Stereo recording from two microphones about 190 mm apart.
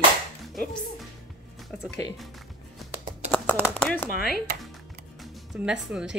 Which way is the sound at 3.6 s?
10° left (ahead or behind).